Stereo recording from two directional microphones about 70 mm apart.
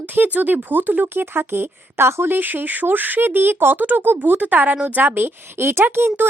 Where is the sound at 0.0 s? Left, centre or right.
Right.